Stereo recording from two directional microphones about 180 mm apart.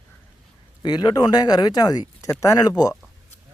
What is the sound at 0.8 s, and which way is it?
Speech, 25° left (ahead or behind).